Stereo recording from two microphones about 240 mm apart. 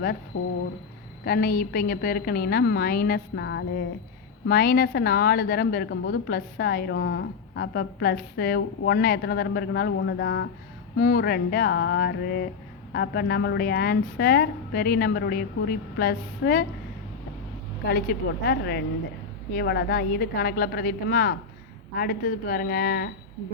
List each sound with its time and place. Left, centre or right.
1.2 s a woman's voice: left
17.8 s a woman's voice: left